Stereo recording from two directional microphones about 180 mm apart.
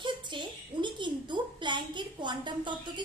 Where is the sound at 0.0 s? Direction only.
25° right (ahead or behind).